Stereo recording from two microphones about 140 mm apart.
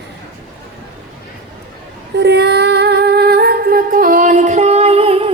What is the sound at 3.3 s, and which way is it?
Music, 90° right.